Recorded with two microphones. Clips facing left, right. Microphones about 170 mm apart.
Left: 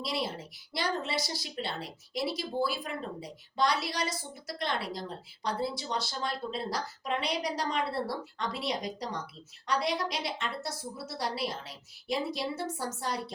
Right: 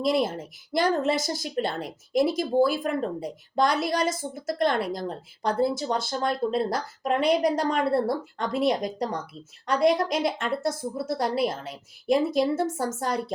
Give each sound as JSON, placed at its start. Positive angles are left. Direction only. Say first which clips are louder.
{"t": 0.0, "sound": "speech", "louder": "right 10 dB", "side_deg": -50}